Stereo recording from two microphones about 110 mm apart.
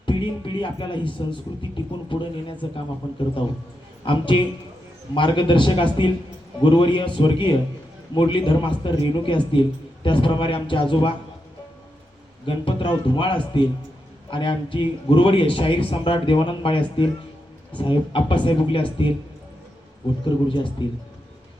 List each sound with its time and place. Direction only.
0.0 s a man's voice: 45° left (ahead or behind)
4.0 s a man's voice: 50° left (ahead or behind)
12.5 s a man's voice: 50° left (ahead or behind)
20.2 s a man's voice: 45° left (ahead or behind)